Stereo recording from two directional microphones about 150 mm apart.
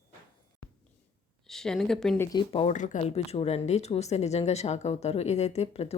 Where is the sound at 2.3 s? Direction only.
40° left (ahead or behind).